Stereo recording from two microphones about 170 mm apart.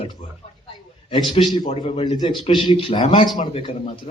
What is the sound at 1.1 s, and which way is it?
Speech, 30° left (ahead or behind).